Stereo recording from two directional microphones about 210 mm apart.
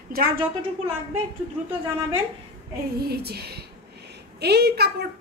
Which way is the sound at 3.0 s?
50° right (ahead or behind).